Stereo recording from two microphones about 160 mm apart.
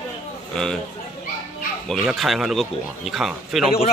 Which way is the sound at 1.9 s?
Centre (ahead or behind).